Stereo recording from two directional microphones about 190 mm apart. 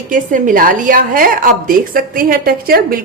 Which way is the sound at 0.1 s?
45° right (ahead or behind).